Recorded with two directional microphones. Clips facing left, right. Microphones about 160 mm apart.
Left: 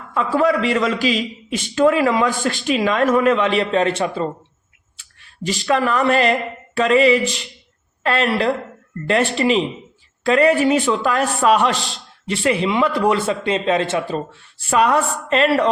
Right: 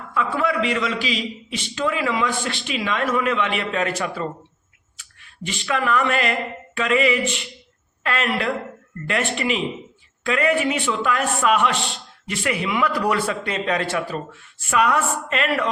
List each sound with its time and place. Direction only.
0.1 s a man's voice: 35° left (ahead or behind)